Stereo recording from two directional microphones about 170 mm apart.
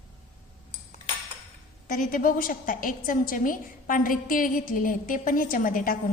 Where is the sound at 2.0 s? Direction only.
55° left (ahead or behind).